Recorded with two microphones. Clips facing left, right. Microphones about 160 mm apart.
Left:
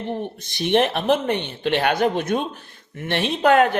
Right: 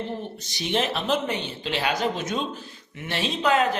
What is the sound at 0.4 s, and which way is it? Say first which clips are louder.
Speech: left 7 dB; 55° left (ahead or behind).